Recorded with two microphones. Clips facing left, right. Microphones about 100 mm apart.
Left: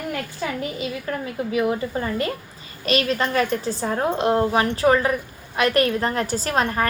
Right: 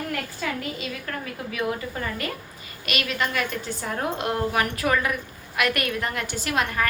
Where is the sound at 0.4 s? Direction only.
25° left (ahead or behind).